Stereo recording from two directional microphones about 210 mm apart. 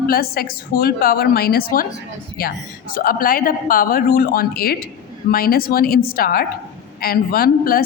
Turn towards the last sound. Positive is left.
turn(degrees=45)  # may be behind; listen again after turning